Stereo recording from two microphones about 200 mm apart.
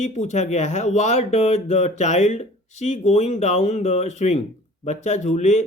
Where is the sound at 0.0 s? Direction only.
35° left (ahead or behind).